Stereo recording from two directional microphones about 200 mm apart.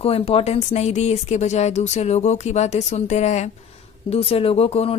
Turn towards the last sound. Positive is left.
turn(degrees=30)  # may be behind; listen again after turning